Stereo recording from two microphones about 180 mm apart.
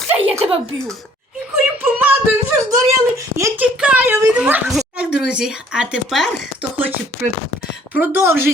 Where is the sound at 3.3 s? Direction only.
15° right (ahead or behind).